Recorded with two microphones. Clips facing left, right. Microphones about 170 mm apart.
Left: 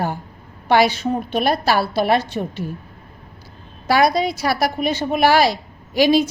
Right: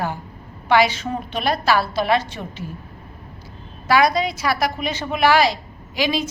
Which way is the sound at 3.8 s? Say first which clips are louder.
Left 1 dB; 35° left (ahead or behind).